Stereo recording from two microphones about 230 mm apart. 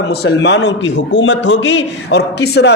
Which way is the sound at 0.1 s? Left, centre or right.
Left.